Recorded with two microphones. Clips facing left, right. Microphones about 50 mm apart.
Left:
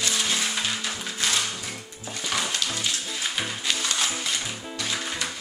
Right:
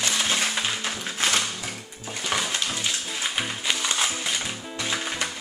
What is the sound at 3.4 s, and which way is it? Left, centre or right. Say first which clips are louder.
Music: right 1 dB; centre.